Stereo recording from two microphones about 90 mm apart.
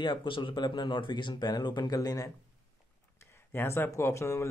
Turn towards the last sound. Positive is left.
turn(degrees=30)  # may be behind; listen again after turning